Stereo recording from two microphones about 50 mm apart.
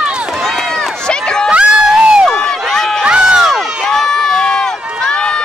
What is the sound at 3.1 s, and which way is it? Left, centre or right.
Crowd, centre.